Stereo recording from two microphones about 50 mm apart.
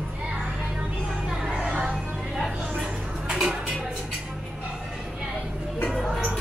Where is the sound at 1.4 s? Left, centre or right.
Centre.